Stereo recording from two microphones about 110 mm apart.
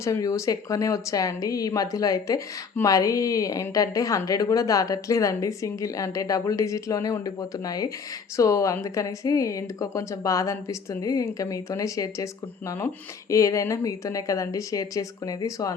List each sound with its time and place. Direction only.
0.0 s a woman's voice: 30° left (ahead or behind)